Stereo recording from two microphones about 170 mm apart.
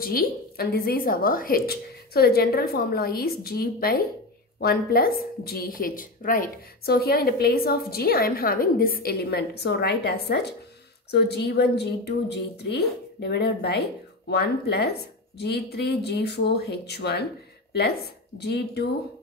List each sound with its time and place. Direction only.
0.0 s a woman's voice: 60° left (ahead or behind)
18.4 s speech: 75° left (ahead or behind)